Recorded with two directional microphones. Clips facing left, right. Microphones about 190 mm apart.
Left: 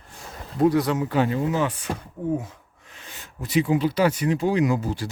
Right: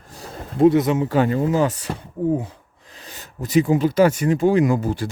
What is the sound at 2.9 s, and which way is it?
Speech, 35° right (ahead or behind).